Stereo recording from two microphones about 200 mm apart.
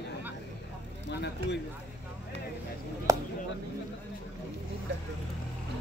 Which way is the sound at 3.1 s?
15° right (ahead or behind).